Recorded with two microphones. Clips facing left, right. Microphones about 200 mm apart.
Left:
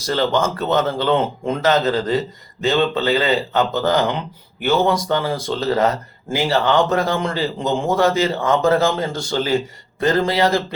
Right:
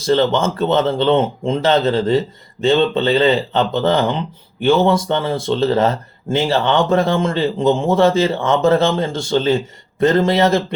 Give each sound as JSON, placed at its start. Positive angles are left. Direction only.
{"t": 0.0, "sound": "speech", "side_deg": -25}